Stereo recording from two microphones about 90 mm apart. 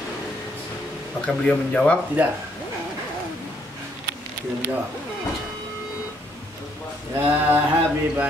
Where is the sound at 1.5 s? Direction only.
15° left (ahead or behind).